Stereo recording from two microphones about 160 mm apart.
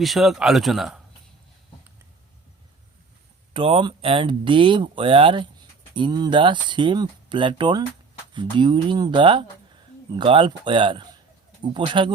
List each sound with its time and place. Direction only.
0.0 s speech: centre (ahead or behind)
3.5 s speech: 35° right (ahead or behind)